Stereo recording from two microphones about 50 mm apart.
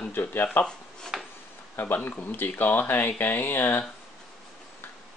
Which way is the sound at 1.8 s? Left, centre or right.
Left.